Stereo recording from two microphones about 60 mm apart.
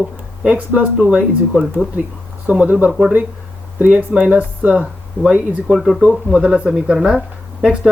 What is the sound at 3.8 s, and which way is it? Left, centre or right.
Speech, right.